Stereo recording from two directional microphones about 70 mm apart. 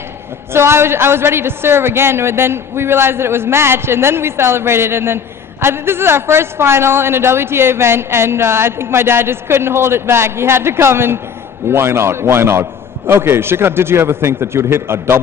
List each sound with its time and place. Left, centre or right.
0.5 s a woman's voice: right